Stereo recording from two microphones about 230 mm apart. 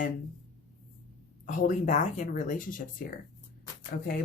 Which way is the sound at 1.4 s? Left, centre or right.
Left.